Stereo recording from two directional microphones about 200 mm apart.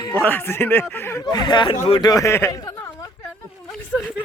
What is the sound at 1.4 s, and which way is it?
A man's voice, 25° left (ahead or behind).